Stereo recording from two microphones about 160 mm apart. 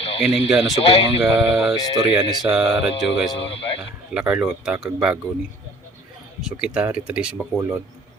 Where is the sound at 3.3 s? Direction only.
35° left (ahead or behind).